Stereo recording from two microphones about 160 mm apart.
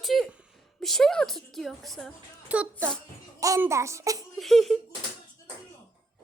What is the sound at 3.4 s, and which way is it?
Speech, 20° right (ahead or behind).